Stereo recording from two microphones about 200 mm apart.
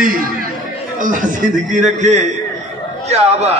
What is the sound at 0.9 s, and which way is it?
A man's voice, 40° right (ahead or behind).